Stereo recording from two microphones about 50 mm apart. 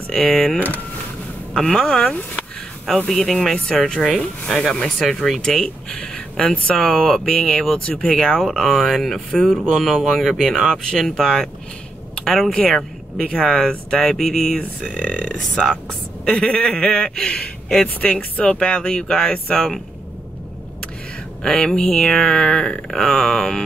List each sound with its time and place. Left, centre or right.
0.1 s speech: centre
1.5 s speech: centre
3.1 s speech: centre; by 7.6 s left
7.6 s speech: centre
12.5 s speech: left
14.1 s speech: centre
15.0 s speech: left; by 19.8 s centre
21.4 s speech: centre